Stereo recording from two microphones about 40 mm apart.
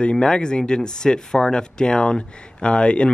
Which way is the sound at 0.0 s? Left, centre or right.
Left.